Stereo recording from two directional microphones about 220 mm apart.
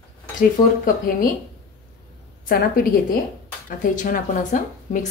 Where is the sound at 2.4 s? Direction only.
40° left (ahead or behind).